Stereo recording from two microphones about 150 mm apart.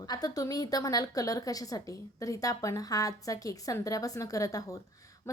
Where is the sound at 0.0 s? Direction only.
25° left (ahead or behind).